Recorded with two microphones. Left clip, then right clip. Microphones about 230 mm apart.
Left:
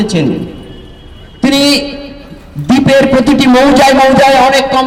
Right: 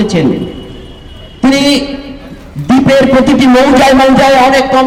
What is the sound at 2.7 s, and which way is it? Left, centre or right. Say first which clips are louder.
A man's voice: right 1 dB; left.